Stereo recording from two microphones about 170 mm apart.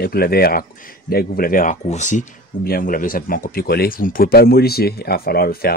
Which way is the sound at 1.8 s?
45° left (ahead or behind).